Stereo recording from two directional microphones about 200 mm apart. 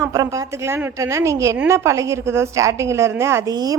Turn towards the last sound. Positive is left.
turn(degrees=-20)  # may be behind; listen again after turning